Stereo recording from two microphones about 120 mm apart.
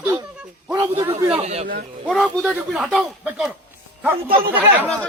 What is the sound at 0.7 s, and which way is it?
Speech, 35° right (ahead or behind).